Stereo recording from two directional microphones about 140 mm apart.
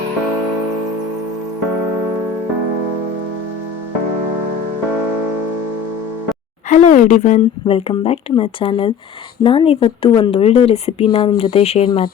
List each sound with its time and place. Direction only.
6.7 s speech: 60° left (ahead or behind)
7.7 s a woman's voice: 45° left (ahead or behind)
11.5 s speech: 45° left (ahead or behind)